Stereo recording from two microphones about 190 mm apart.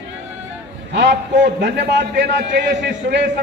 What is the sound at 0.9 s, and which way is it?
A man's voice, 70° right (ahead or behind).